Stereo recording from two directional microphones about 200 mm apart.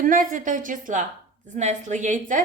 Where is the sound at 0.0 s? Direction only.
45° right (ahead or behind).